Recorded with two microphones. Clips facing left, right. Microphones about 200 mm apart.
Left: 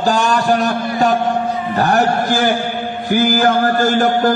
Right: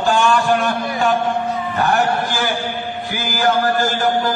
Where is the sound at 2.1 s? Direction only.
50° left (ahead or behind).